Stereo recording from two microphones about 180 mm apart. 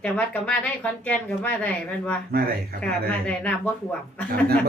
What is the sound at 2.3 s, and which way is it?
Speech, 55° right (ahead or behind).